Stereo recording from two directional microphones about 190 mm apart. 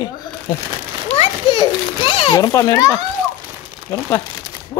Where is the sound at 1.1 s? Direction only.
25° left (ahead or behind).